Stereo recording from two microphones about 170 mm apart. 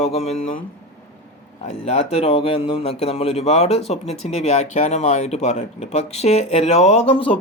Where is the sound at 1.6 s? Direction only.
40° left (ahead or behind).